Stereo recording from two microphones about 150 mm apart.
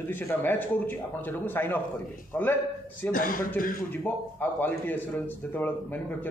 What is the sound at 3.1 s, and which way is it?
Speech, 65° left (ahead or behind).